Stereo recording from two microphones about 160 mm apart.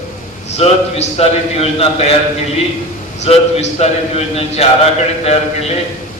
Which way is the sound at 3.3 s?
40° left (ahead or behind).